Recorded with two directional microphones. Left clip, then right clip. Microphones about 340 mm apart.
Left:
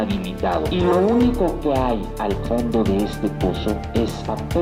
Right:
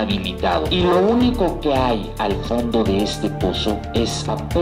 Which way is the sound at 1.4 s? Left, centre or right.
Centre.